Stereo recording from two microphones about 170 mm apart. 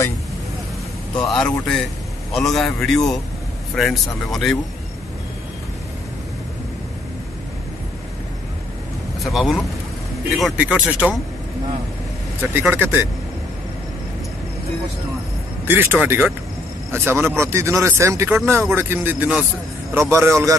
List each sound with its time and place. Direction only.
1.4 s a man's voice: 5° left (ahead or behind)
9.2 s a man's voice: centre (ahead or behind)
12.4 s speech: 10° right (ahead or behind)
15.6 s speech: 10° right (ahead or behind)